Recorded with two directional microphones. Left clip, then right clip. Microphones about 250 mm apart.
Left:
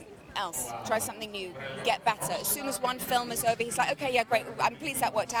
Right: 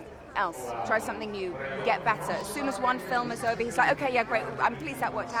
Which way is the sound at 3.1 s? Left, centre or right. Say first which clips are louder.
Left 1 dB; centre.